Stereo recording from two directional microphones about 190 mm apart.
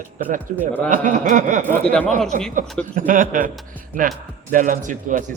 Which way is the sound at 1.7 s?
5° left (ahead or behind).